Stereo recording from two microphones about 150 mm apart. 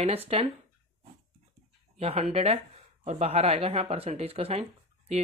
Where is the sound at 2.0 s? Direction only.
45° right (ahead or behind).